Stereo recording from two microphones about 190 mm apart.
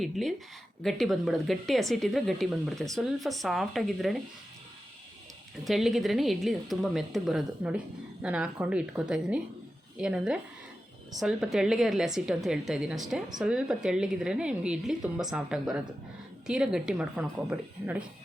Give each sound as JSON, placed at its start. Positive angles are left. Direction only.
{"t": 0.0, "sound": "a woman's voice", "side_deg": 0}
{"t": 5.6, "sound": "a woman's voice", "side_deg": 0}